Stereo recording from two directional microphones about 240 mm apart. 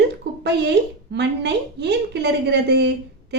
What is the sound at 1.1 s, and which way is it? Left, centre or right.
A woman's voice, right.